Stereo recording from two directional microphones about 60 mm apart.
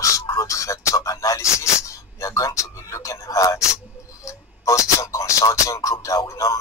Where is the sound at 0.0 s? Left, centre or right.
Left.